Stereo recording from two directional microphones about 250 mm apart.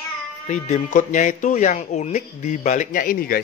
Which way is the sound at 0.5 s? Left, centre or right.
Left.